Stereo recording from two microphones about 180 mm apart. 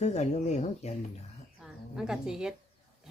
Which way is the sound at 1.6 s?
Centre (ahead or behind).